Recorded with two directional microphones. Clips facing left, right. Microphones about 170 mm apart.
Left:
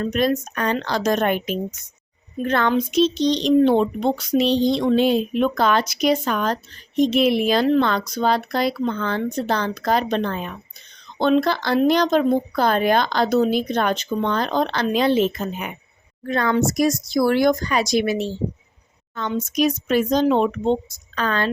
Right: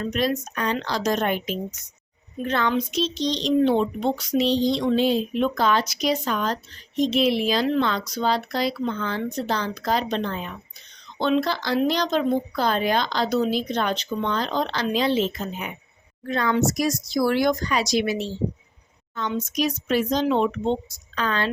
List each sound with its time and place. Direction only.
0.0 s speech: 50° left (ahead or behind)